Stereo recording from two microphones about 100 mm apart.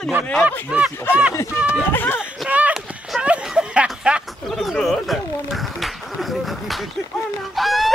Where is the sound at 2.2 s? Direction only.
10° right (ahead or behind).